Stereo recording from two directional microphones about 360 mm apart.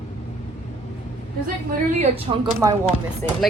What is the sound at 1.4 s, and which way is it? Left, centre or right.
A woman's voice, centre.